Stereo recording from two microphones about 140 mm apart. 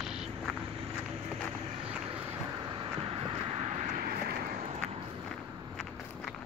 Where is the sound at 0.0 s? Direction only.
5° right (ahead or behind).